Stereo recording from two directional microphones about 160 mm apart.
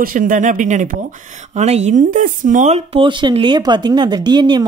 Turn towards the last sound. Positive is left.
turn(degrees=-30)  # may be behind; listen again after turning